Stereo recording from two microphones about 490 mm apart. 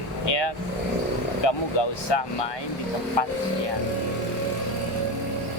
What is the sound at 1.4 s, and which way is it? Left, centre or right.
Speech, left.